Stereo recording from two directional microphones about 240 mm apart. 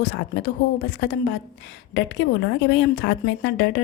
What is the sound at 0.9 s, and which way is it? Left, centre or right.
Speech, left.